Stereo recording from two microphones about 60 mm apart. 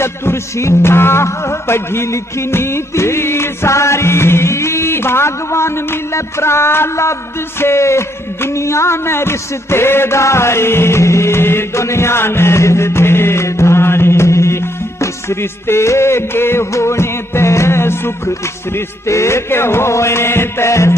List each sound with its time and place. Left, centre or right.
0.0 s music: left
7.6 s speech: left
16.7 s music: left